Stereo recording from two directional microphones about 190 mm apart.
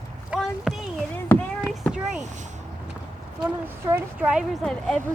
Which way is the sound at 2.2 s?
40° right (ahead or behind).